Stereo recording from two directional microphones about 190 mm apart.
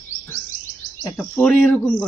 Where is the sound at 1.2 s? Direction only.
5° left (ahead or behind).